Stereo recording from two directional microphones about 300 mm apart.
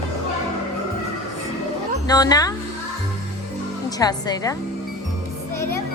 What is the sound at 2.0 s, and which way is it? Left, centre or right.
Speech, centre.